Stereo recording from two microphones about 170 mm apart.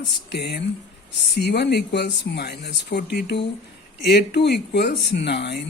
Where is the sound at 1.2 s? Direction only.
85° left.